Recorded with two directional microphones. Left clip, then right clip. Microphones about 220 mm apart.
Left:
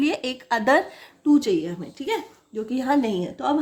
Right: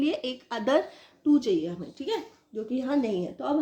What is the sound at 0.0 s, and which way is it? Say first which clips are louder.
A woman's voice: left 4 dB; 35° left (ahead or behind).